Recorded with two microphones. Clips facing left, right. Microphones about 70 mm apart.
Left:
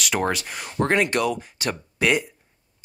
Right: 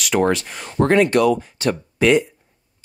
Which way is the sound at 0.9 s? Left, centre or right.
Centre.